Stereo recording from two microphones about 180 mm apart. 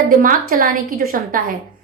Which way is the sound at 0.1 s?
50° right (ahead or behind).